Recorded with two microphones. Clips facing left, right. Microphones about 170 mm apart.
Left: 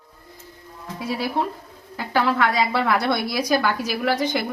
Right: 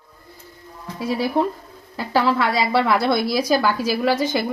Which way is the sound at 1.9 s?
30° right (ahead or behind).